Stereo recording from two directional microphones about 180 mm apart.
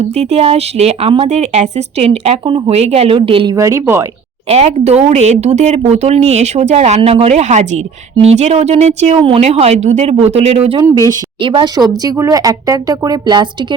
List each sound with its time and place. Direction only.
0.0 s speech: 35° right (ahead or behind)
3.5 s speech: 15° right (ahead or behind)
4.4 s speech: 35° right (ahead or behind)
10.9 s speech: 20° right (ahead or behind)